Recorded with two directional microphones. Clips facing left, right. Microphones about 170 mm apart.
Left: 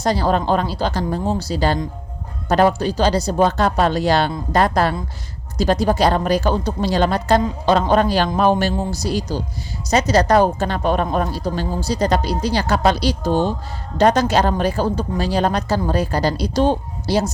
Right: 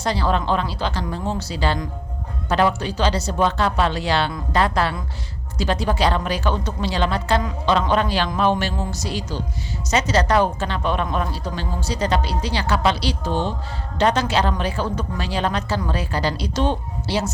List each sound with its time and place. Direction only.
0.0 s speech: 40° left (ahead or behind)